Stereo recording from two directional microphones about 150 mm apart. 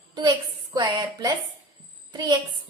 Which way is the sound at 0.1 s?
30° right (ahead or behind).